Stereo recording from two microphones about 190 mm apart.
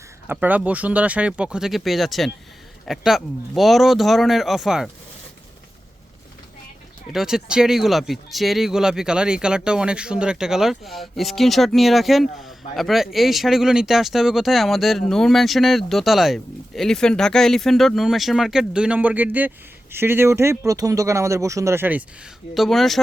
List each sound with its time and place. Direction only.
0.3 s speech: 10° right (ahead or behind)
7.1 s speech: centre (ahead or behind)
22.5 s speech: centre (ahead or behind)